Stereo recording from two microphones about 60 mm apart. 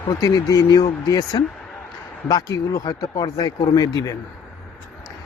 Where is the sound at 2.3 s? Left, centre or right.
Left.